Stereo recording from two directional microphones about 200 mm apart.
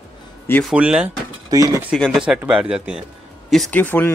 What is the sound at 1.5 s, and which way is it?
Speech, 20° right (ahead or behind).